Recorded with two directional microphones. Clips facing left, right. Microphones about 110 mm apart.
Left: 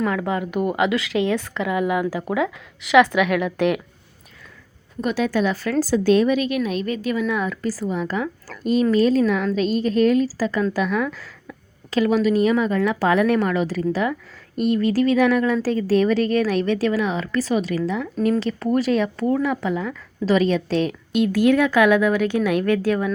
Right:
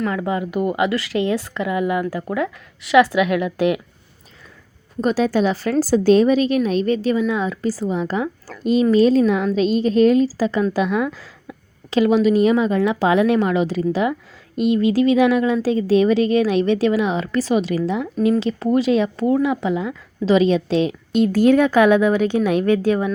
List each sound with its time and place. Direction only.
0.0 s speech: centre (ahead or behind)
4.9 s a woman's voice: 35° right (ahead or behind)
17.8 s a woman's voice: 25° right (ahead or behind)
18.2 s a woman's voice: 10° right (ahead or behind)